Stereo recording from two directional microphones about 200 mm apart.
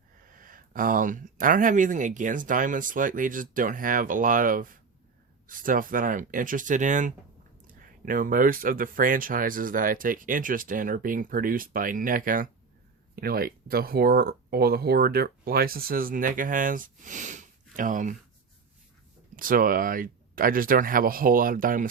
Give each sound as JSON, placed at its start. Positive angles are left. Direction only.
{"t": 0.3, "sound": "speech", "side_deg": -45}
{"t": 19.4, "sound": "speech", "side_deg": -45}